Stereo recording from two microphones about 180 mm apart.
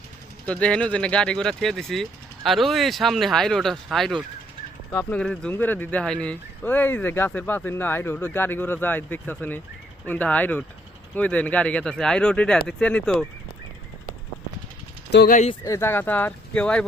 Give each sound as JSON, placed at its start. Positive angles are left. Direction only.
{"t": 0.4, "sound": "speech", "side_deg": 5}
{"t": 4.9, "sound": "speech", "side_deg": 10}
{"t": 15.1, "sound": "speech", "side_deg": 60}
{"t": 15.6, "sound": "speech", "side_deg": 15}